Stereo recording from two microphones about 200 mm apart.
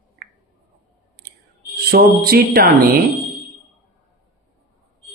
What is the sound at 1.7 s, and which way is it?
A woman's voice, 50° right (ahead or behind).